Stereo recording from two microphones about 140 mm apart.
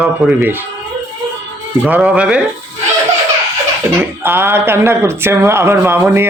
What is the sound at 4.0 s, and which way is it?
Speech, 15° right (ahead or behind).